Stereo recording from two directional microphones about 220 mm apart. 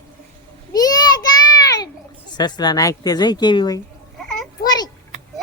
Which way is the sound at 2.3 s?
20° left (ahead or behind).